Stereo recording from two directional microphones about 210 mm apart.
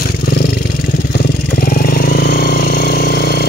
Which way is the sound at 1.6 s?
45° left (ahead or behind).